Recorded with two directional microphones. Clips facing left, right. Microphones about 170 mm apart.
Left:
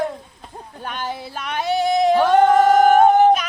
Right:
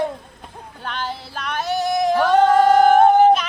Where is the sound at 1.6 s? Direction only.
60° left (ahead or behind).